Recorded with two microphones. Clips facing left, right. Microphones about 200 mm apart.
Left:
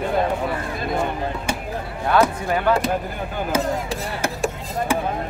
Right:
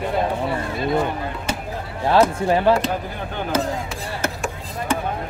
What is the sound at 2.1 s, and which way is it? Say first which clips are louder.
Speech: right 2 dB; 30° right (ahead or behind).